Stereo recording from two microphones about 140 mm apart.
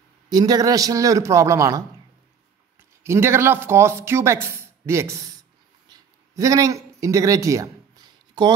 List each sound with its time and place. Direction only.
0.3 s speech: 30° right (ahead or behind)
3.0 s speech: 20° right (ahead or behind)
5.9 s a sound: 25° right (ahead or behind)